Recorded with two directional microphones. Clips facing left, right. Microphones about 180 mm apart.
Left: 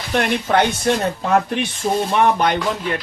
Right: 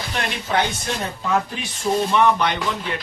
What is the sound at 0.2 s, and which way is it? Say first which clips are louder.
Speech: left 6 dB; 60° left (ahead or behind).